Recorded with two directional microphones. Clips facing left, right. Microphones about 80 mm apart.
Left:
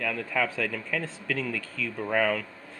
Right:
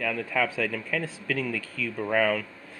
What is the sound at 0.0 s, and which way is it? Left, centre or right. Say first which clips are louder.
Speech: right 1 dB; centre.